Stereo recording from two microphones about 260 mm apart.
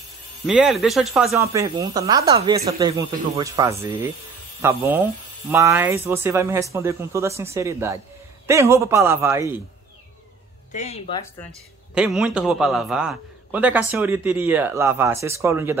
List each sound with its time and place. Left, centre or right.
0.5 s a man's voice: centre
10.7 s speech: left
11.9 s a man's voice: centre